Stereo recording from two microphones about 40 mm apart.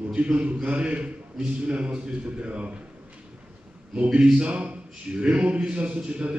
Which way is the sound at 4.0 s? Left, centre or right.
Right.